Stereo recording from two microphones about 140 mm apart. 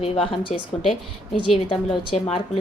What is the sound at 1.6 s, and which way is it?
Speech, 35° left (ahead or behind).